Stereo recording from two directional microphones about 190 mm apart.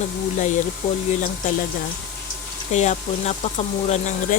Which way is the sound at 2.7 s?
40° left (ahead or behind).